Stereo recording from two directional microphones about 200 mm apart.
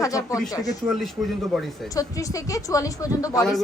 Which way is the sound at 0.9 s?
Centre (ahead or behind).